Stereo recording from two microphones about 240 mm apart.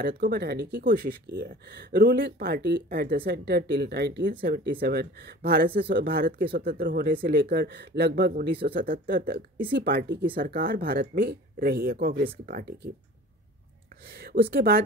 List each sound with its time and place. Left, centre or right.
0.0 s speech: right
14.1 s speech: right